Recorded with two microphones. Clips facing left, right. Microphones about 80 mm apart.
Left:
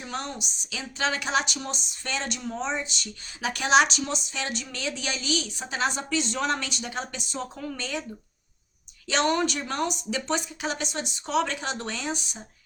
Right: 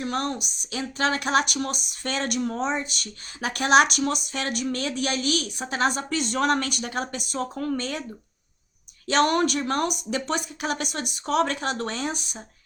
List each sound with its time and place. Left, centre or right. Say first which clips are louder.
0.0 s speech: right 6 dB; right
9.0 s speech: right 3 dB; right